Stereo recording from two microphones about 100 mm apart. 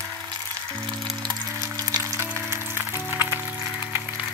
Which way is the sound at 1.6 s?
35° right (ahead or behind).